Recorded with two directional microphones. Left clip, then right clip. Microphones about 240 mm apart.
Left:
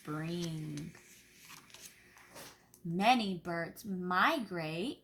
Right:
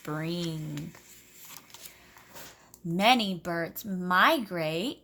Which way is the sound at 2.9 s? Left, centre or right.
Right.